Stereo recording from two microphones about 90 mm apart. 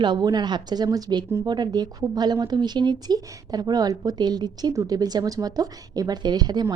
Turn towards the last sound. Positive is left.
turn(degrees=-50)  # may be behind; listen again after turning